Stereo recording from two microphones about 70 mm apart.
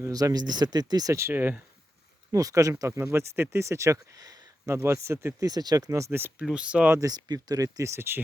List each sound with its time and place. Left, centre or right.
0.1 s speech: right
1.3 s speech: right
2.3 s speech: right
4.7 s speech: right
5.4 s speech: right
6.1 s speech: right
6.4 s speech: centre
7.0 s speech: right
7.9 s speech: right